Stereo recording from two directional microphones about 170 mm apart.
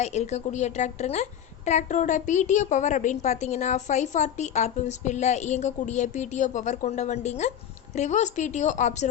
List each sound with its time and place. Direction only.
0.0 s a woman's voice: 40° left (ahead or behind)